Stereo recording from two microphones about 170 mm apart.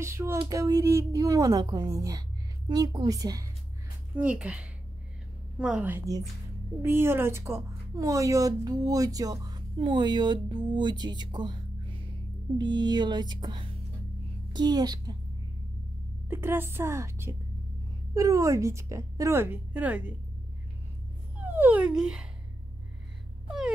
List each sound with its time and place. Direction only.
0.0 s a woman's voice: 15° right (ahead or behind)
4.2 s a woman's voice: 5° right (ahead or behind); by 15.1 s 25° right (ahead or behind)
16.3 s a woman's voice: 15° right (ahead or behind)
21.5 s a woman's voice: 10° right (ahead or behind)